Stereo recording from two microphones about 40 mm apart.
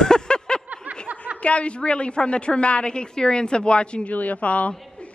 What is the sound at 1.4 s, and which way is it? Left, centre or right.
A woman's voice, left.